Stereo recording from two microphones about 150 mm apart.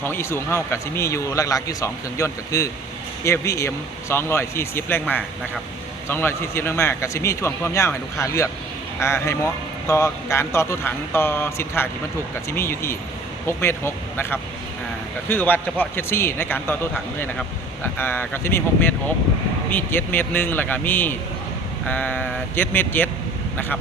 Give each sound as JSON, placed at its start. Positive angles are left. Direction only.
{"t": 0.0, "sound": "speech", "side_deg": 15}
{"t": 17.8, "sound": "speech", "side_deg": 15}